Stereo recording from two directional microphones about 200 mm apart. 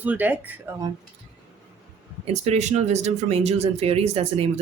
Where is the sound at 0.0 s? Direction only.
10° right (ahead or behind).